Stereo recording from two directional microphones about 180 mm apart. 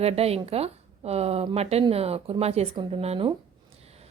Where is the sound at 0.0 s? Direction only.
35° right (ahead or behind).